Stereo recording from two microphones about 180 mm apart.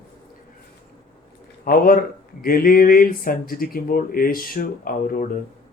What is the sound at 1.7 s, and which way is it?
Speech, 50° left (ahead or behind).